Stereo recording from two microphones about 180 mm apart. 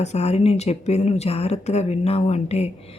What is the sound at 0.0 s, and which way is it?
Speech, 35° left (ahead or behind).